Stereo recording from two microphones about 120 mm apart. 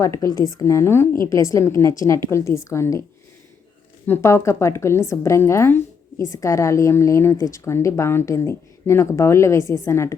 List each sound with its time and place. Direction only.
0.0 s a woman's voice: 25° left (ahead or behind)
4.0 s a woman's voice: 20° left (ahead or behind)